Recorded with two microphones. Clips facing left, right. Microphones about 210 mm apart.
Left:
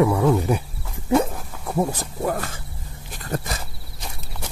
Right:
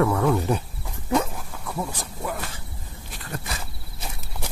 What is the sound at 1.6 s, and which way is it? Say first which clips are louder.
Wild animals: left 8 dB; 45° left (ahead or behind).